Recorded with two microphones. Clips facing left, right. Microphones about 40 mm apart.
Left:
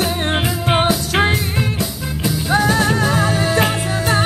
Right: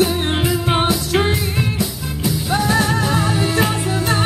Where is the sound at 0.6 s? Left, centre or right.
Left.